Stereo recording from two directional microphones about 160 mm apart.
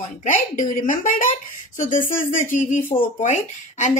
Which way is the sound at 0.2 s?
55° left (ahead or behind).